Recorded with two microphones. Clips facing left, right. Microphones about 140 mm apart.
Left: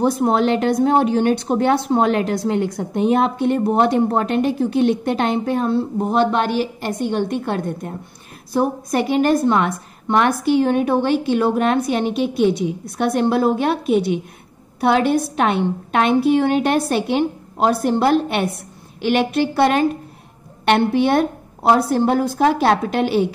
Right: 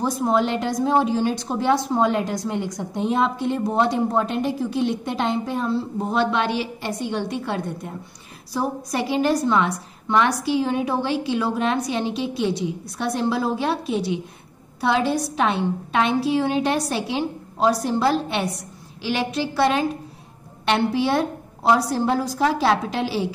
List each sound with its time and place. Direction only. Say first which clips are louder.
0.0 s a woman's voice: left 4 dB; 65° left (ahead or behind)
8.9 s a woman's voice: left 4 dB; 55° left (ahead or behind)